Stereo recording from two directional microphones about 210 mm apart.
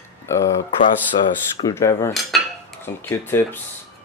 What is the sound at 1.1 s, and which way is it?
Speech, 25° left (ahead or behind).